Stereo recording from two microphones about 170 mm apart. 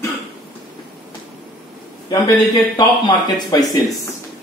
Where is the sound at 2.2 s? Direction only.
25° left (ahead or behind).